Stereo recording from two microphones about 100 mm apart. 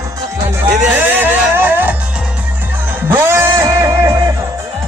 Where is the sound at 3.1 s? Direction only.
25° right (ahead or behind).